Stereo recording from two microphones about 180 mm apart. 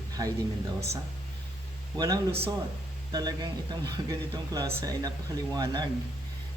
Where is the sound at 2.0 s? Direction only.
20° right (ahead or behind).